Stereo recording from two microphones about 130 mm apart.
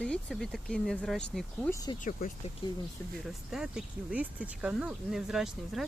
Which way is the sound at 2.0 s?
80° left.